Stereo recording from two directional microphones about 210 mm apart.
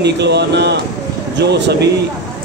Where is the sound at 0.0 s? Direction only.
55° right (ahead or behind).